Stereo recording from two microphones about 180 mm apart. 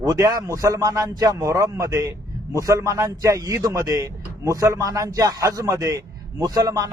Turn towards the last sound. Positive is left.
turn(degrees=-20)  # may be behind; listen again after turning